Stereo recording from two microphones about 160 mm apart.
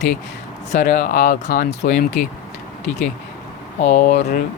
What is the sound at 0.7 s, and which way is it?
Speech, 60° left (ahead or behind).